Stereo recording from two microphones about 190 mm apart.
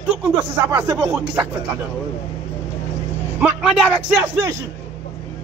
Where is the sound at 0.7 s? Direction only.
15° right (ahead or behind).